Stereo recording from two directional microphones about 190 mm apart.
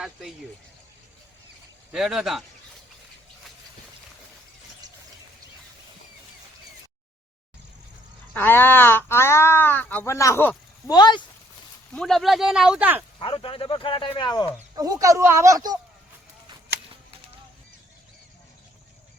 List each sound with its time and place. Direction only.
0.0 s speech: centre (ahead or behind)
1.9 s speech: centre (ahead or behind)
8.3 s speech: 10° left (ahead or behind)
11.9 s speech: centre (ahead or behind)
13.1 s speech: 25° left (ahead or behind)
14.8 s speech: 20° right (ahead or behind)